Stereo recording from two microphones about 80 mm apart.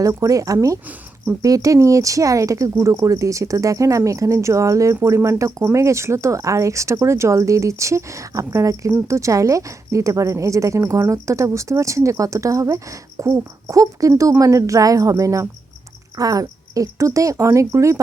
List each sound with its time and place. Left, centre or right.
0.0 s a woman's voice: right